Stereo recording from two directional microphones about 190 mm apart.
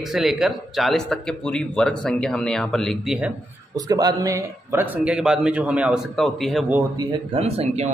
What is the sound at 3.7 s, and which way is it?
Speech, 20° right (ahead or behind).